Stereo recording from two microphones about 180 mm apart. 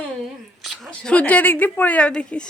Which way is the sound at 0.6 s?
Centre (ahead or behind).